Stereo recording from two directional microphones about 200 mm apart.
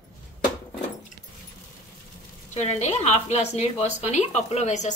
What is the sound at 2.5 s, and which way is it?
A woman's voice, 35° left (ahead or behind).